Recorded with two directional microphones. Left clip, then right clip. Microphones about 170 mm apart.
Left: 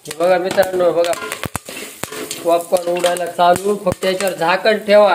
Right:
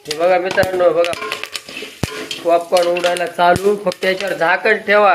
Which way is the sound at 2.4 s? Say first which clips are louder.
Right 2 dB; 10° left (ahead or behind).